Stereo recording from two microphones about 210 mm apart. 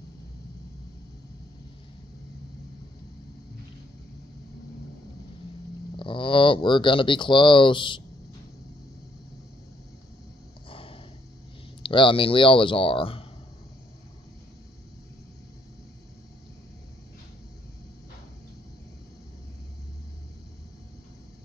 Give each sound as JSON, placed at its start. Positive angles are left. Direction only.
{"t": 5.9, "sound": "speech", "side_deg": 25}
{"t": 10.7, "sound": "a sound", "side_deg": 25}
{"t": 11.8, "sound": "speech", "side_deg": 25}